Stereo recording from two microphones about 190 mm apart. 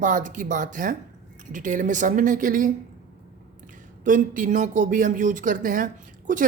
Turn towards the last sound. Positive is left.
turn(degrees=-45)  # may be behind; listen again after turning